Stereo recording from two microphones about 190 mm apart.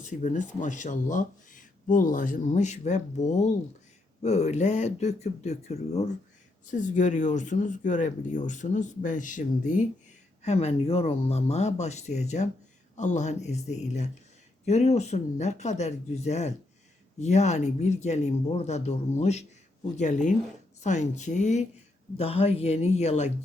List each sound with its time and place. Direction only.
0.0 s speech: 40° left (ahead or behind)